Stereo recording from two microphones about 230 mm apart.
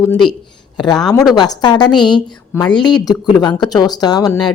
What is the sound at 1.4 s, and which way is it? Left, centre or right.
A woman's voice, centre.